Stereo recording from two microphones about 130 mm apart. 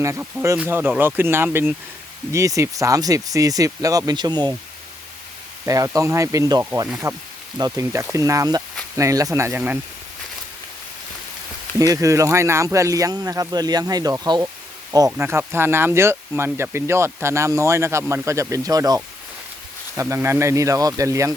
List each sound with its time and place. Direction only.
0.5 s speech: 10° right (ahead or behind); by 4.5 s 35° right (ahead or behind)
5.6 s speech: 25° right (ahead or behind)
11.8 s speech: 25° right (ahead or behind)